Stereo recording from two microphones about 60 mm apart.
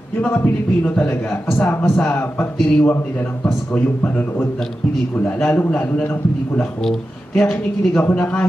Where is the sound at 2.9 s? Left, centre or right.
Left.